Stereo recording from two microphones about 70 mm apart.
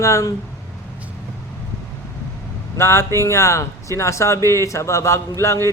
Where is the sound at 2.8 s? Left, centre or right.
Left.